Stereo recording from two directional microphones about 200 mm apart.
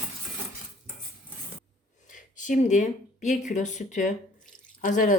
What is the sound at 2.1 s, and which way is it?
Speech, 40° left (ahead or behind).